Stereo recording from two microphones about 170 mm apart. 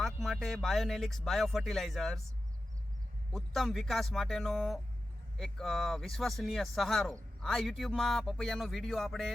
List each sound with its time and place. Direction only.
0.0 s speech: centre (ahead or behind)
3.3 s speech: centre (ahead or behind)